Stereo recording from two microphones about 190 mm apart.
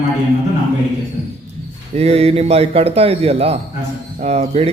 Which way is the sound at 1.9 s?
35° right (ahead or behind).